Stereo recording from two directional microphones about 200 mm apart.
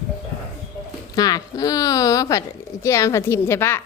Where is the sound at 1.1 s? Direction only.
20° left (ahead or behind).